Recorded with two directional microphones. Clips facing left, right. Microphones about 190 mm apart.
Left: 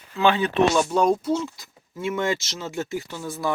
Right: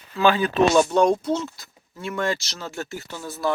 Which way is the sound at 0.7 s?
5° left (ahead or behind).